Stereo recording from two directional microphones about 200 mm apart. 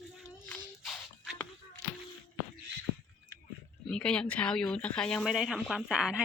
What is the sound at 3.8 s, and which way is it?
Speech, 5° left (ahead or behind).